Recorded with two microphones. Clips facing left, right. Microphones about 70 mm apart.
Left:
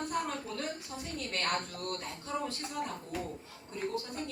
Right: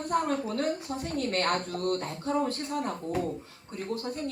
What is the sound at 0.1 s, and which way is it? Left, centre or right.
Speech, right.